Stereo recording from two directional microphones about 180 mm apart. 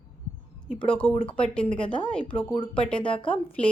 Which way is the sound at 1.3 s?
5° left (ahead or behind).